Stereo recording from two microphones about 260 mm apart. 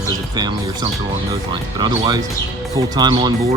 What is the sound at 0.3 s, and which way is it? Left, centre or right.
Speech, centre.